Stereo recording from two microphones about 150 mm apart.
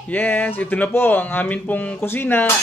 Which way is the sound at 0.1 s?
10° left (ahead or behind).